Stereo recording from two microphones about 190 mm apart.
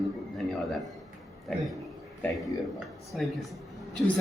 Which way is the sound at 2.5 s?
15° left (ahead or behind).